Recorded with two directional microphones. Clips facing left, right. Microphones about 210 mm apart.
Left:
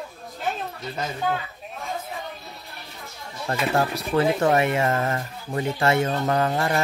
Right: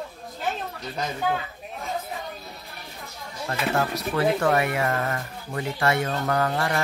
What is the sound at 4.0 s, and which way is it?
Speech, 25° left (ahead or behind).